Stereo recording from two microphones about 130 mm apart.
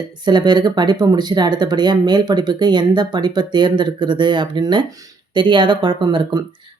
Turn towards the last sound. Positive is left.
turn(degrees=-35)  # may be behind; listen again after turning